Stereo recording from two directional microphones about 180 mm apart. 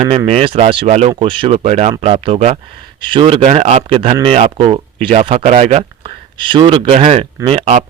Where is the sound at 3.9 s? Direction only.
30° right (ahead or behind).